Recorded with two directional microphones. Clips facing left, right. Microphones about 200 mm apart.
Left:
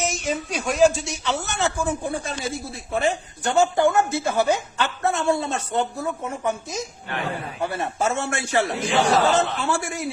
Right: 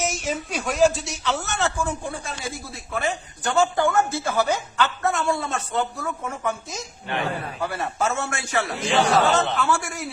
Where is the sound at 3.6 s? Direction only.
20° left (ahead or behind).